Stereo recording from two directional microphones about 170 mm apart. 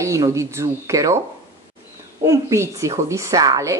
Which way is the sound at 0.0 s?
20° right (ahead or behind).